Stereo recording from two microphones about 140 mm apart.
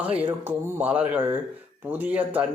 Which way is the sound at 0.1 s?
40° right (ahead or behind).